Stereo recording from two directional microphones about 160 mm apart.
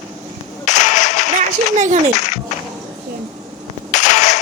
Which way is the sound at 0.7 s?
50° left (ahead or behind).